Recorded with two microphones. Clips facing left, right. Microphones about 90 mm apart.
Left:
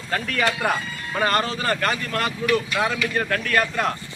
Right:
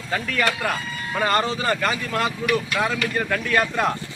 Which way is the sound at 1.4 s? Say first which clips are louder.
Right 2 dB; 20° right (ahead or behind).